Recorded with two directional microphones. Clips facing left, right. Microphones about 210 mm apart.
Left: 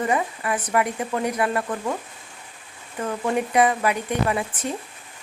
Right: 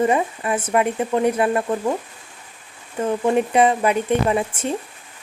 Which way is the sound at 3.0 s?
25° right (ahead or behind).